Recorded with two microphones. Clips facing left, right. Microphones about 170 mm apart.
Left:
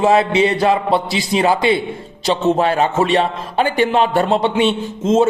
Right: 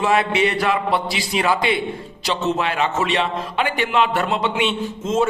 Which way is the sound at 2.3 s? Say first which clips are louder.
Left 6 dB; 35° left (ahead or behind).